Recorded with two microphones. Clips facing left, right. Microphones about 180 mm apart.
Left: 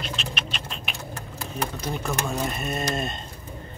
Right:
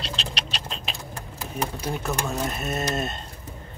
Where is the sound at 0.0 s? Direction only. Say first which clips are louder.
Even; 35° right (ahead or behind).